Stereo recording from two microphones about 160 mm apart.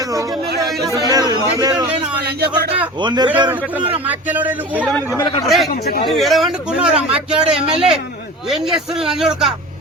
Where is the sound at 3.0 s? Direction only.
25° right (ahead or behind).